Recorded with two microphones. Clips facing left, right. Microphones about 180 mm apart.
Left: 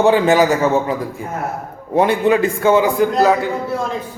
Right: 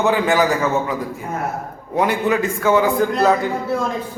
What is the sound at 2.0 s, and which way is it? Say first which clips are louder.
Speech: left 4 dB; 30° left (ahead or behind).